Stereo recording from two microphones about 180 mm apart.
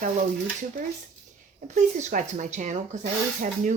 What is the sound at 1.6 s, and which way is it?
Speech, 40° right (ahead or behind).